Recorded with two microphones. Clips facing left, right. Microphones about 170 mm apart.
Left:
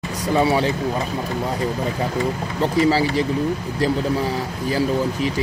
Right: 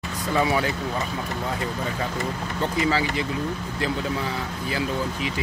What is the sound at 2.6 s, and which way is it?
Speech, 35° left (ahead or behind).